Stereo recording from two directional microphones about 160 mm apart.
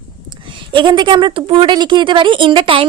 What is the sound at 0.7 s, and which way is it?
Speech, 30° right (ahead or behind).